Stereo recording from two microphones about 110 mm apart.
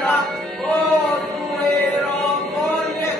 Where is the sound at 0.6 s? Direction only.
10° left (ahead or behind).